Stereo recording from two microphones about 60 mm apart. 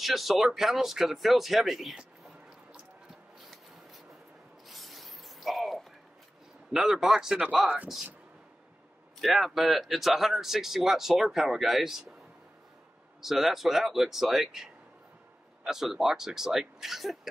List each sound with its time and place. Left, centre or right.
0.0 s speech: centre
4.6 s a sound: centre
6.7 s speech: centre
7.6 s speech: right
9.2 s speech: centre
13.2 s speech: centre